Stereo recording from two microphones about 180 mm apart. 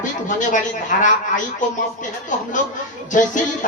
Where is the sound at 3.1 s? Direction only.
45° left (ahead or behind).